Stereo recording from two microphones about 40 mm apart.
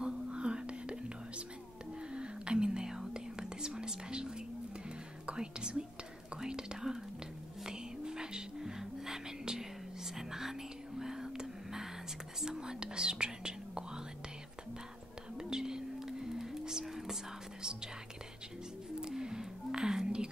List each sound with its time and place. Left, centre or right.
0.0 s whispering: right
2.1 s whispering: right
5.2 s speech: right
6.3 s whispering: centre
7.6 s music: centre
10.1 s whispering: centre
15.3 s a sound: centre
18.9 s a sound: centre